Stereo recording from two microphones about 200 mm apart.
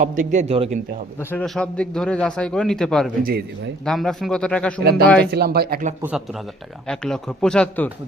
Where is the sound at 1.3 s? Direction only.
5° left (ahead or behind).